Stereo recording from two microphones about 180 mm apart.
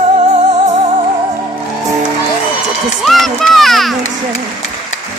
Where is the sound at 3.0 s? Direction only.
Centre (ahead or behind).